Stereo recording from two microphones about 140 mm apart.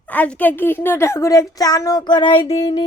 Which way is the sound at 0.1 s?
10° left (ahead or behind).